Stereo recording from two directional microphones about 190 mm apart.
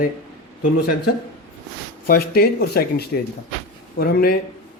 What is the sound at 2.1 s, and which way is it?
Speech, 55° left (ahead or behind).